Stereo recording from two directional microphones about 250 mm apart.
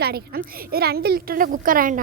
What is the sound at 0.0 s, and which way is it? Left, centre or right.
Speech, right.